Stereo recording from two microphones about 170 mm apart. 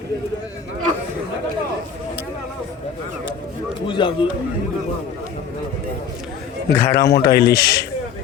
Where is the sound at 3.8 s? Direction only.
30° left (ahead or behind).